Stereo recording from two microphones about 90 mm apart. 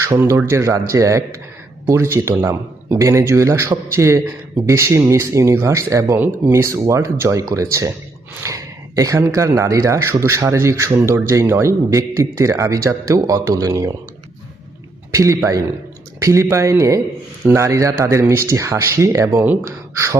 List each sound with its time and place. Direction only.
0.3 s speech: 30° right (ahead or behind)
15.1 s speech: 35° right (ahead or behind)